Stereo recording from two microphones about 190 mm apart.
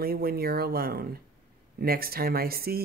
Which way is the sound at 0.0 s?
55° right (ahead or behind).